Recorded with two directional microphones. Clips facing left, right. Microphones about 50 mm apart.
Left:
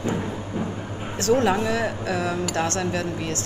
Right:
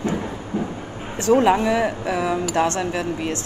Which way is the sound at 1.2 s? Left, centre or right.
Right.